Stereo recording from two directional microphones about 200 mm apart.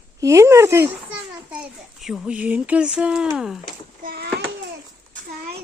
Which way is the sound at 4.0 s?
50° right (ahead or behind).